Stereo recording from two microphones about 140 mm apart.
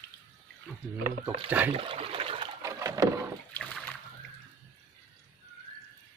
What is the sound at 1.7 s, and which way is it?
Water, 40° right (ahead or behind).